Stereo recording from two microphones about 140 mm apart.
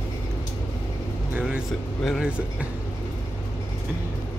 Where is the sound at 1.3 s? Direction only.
10° right (ahead or behind).